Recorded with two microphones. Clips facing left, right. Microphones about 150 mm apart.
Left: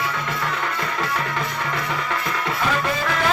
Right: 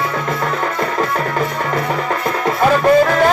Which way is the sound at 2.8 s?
45° right (ahead or behind).